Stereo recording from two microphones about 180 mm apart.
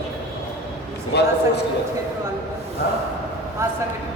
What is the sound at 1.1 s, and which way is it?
Speech, 65° left (ahead or behind).